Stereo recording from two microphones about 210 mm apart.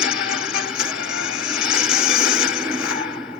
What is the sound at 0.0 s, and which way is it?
Music, 5° right (ahead or behind).